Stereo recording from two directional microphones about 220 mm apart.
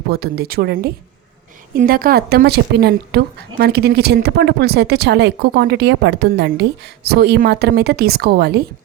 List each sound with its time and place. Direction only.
0.1 s a woman's voice: 45° right (ahead or behind)